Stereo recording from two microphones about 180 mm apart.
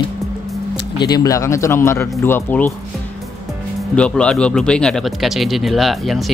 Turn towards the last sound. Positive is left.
turn(degrees=0)  # may be behind; listen again after turning